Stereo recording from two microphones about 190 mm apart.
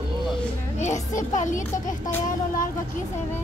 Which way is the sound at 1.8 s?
20° left (ahead or behind).